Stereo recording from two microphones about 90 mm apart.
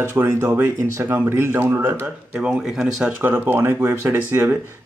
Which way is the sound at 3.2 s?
20° right (ahead or behind).